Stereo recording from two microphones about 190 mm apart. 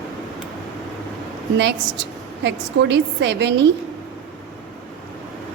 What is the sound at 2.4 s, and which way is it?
A woman's voice, 65° right (ahead or behind).